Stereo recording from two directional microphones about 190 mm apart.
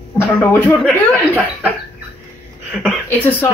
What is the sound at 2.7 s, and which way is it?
Speech, centre (ahead or behind).